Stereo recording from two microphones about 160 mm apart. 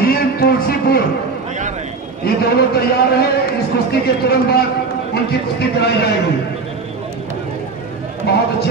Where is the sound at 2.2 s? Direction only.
80° left.